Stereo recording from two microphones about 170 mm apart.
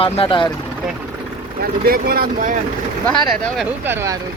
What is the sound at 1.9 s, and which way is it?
Speech, 60° right (ahead or behind).